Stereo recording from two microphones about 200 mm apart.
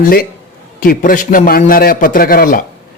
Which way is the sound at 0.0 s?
45° left (ahead or behind).